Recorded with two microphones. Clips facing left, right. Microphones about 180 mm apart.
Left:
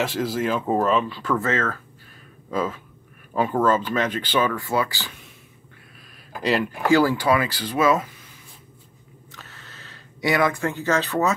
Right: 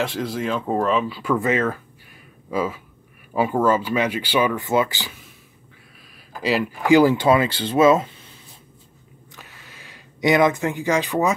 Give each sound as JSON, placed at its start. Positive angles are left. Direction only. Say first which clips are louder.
{"t": 0.0, "sound": "speech", "louder": "left 1 dB", "side_deg": 0}
{"t": 6.4, "sound": "speech", "louder": "right 1 dB", "side_deg": 0}
{"t": 6.9, "sound": "speech", "louder": "right 4 dB", "side_deg": -20}
{"t": 9.3, "sound": "a sound", "louder": "even", "side_deg": -10}